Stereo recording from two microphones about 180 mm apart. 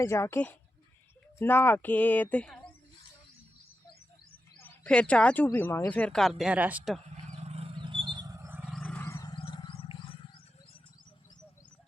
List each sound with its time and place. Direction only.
0.0 s speech: 15° left (ahead or behind)
4.6 s speech: 10° left (ahead or behind)
7.3 s a sound: 35° right (ahead or behind); by 8.6 s 15° right (ahead or behind)
8.7 s a sound: centre (ahead or behind)
9.0 s wild animals: 15° left (ahead or behind)
9.3 s music: 25° left (ahead or behind)